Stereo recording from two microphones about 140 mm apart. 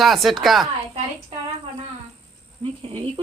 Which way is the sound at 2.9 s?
40° right (ahead or behind).